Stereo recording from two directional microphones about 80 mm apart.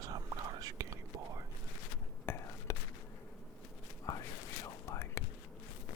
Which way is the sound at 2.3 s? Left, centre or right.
Left.